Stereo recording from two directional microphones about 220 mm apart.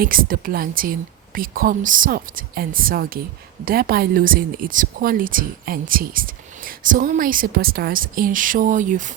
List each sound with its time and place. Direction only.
0.0 s a woman's voice: 40° right (ahead or behind)